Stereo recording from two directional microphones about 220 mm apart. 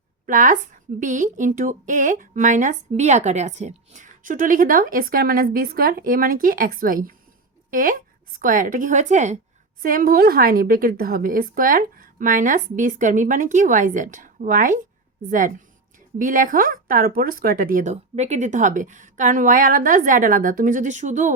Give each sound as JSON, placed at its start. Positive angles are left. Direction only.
{"t": 0.3, "sound": "a woman's voice", "side_deg": -35}